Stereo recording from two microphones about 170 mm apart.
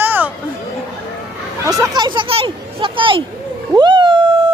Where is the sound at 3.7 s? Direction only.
25° right (ahead or behind).